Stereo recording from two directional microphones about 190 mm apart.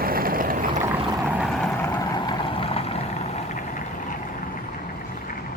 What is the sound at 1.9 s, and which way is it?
Vehicle, 25° left (ahead or behind).